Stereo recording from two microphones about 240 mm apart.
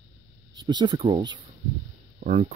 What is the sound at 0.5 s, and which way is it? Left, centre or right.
Speech, centre.